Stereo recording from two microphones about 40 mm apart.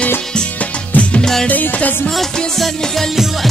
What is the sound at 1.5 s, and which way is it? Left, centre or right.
Music, left.